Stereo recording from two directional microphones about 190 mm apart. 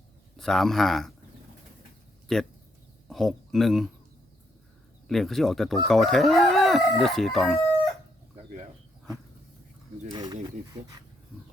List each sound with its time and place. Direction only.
0.3 s speech: centre (ahead or behind)
2.2 s speech: centre (ahead or behind)
5.0 s speech: centre (ahead or behind)
10.1 s speech: 20° right (ahead or behind)